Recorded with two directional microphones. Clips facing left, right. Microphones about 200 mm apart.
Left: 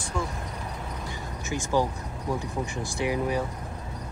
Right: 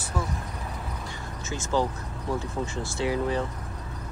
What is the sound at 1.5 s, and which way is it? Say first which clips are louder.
Speech: left 1 dB; 15° left (ahead or behind).